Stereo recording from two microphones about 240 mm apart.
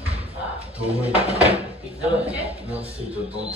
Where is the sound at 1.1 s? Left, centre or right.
Right.